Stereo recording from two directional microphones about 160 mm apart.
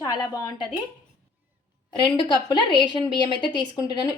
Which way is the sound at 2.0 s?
30° left (ahead or behind).